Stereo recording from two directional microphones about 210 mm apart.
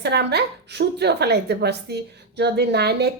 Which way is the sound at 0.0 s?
55° right (ahead or behind).